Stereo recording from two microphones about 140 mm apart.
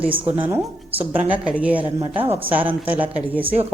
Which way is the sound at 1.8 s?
40° right (ahead or behind).